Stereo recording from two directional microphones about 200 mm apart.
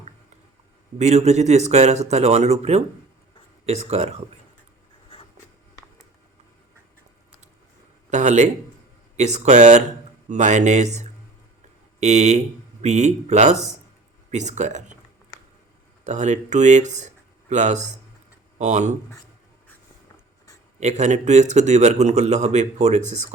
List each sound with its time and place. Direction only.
0.9 s a man's voice: 35° right (ahead or behind)
8.1 s a man's voice: 35° right (ahead or behind)
16.0 s a man's voice: 35° right (ahead or behind)
20.7 s a man's voice: 35° right (ahead or behind)